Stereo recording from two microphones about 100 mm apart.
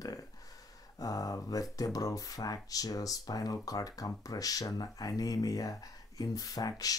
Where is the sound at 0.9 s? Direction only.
35° left (ahead or behind).